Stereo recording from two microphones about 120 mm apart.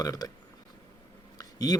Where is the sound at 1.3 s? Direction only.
35° left (ahead or behind).